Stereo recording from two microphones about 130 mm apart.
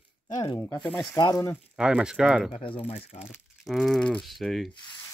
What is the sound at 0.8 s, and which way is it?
Speech, 10° left (ahead or behind).